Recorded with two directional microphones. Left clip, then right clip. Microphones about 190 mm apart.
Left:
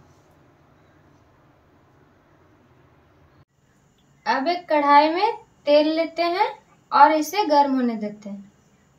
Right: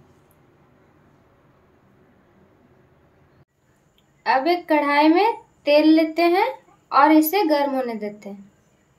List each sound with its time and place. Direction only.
4.2 s a woman's voice: 55° right (ahead or behind)